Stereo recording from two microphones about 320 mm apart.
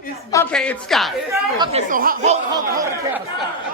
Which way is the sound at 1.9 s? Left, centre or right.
Right.